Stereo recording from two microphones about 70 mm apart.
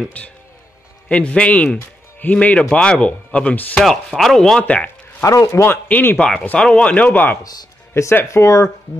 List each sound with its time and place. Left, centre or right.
1.0 s speech: centre
1.8 s music: left
2.3 s speech: centre
3.8 s chopping: centre
4.6 s speech: centre
5.2 s speech: left
5.9 s speech: left
7.1 s speech: left